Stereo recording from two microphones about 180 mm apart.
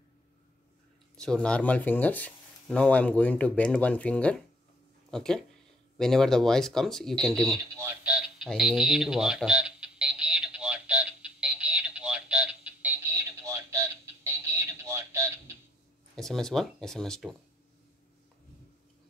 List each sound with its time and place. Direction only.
1.1 s speech: 5° left (ahead or behind)
7.4 s radio: 15° right (ahead or behind)
13.5 s a sound: 15° right (ahead or behind)
16.2 s speech: 5° left (ahead or behind)